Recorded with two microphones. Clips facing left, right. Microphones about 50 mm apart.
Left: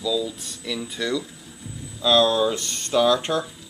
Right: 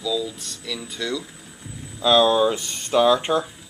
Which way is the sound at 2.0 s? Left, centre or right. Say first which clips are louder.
Right 2 dB; centre.